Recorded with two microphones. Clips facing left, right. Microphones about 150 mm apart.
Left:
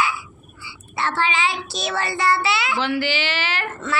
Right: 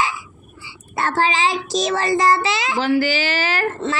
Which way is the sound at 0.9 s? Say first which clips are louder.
Right 3 dB; 45° right (ahead or behind).